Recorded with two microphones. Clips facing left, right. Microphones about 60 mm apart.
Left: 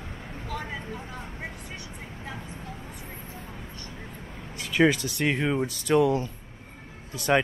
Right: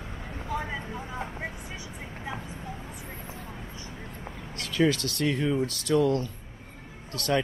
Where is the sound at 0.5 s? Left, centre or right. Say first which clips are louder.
Right 2 dB; centre.